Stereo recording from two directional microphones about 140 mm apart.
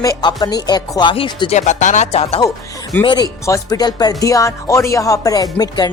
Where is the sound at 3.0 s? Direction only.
30° left (ahead or behind).